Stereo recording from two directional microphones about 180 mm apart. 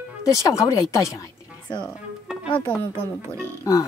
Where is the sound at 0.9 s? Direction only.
20° left (ahead or behind).